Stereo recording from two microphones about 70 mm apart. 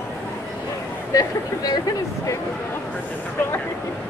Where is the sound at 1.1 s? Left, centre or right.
Left.